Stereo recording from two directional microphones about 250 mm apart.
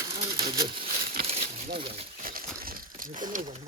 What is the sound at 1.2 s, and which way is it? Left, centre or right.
Crumpling, right.